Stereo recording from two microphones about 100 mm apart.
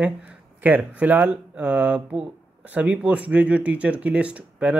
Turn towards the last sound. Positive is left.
turn(degrees=-10)  # may be behind; listen again after turning